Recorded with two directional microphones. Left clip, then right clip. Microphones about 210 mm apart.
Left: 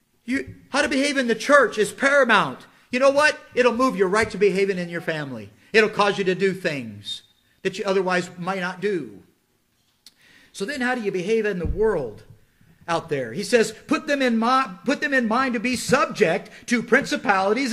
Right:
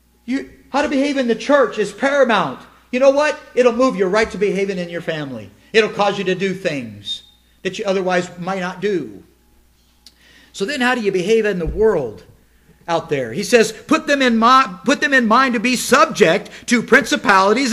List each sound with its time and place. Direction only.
0.3 s a man's voice: 35° left (ahead or behind)
0.7 s a man's voice: 50° left (ahead or behind); by 7.2 s 90° left
7.8 s a man's voice: 70° left (ahead or behind)
8.4 s a man's voice: 20° left (ahead or behind)
8.6 s a man's voice: 10° left (ahead or behind)
10.0 s a sound: 5° right (ahead or behind)
10.7 s a man's voice: 15° right (ahead or behind)
13.1 s a man's voice: centre (ahead or behind)